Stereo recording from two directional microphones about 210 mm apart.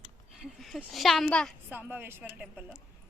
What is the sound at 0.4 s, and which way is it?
A woman's voice, centre (ahead or behind).